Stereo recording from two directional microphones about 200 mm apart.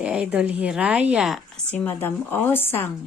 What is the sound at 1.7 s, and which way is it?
Speech, 10° left (ahead or behind).